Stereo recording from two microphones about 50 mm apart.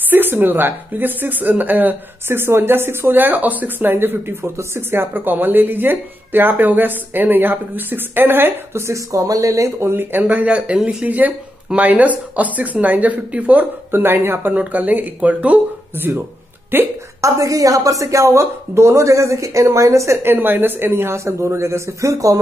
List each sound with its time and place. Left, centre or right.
0.1 s speech: right
2.2 s speech: right
4.6 s a man's voice: right
5.1 s speech: right
8.7 s speech: right
9.8 s speech: right
10.2 s speech: right
10.8 s speech: centre
11.1 s speech: right
13.9 s speech: right
14.5 s speech: right
16.0 s speech: right
17.2 s speech: right
20.2 s a man's voice: right